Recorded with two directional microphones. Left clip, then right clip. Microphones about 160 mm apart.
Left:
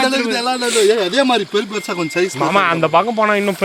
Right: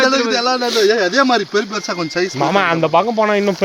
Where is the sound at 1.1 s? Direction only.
20° left (ahead or behind).